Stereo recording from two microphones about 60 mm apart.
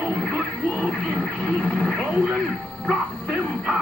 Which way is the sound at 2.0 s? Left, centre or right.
Centre.